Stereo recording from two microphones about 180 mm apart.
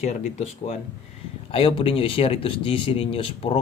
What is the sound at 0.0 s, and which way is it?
Speech, 40° left (ahead or behind).